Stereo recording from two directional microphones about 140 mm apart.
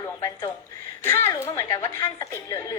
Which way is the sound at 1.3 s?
25° left (ahead or behind).